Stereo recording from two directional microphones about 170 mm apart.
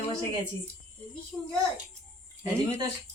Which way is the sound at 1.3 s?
5° left (ahead or behind).